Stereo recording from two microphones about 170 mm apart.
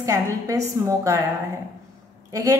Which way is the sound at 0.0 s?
20° right (ahead or behind).